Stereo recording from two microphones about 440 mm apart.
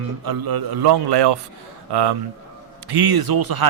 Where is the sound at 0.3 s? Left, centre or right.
Right.